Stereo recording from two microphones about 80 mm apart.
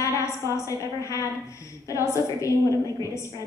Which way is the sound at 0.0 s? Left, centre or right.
Left.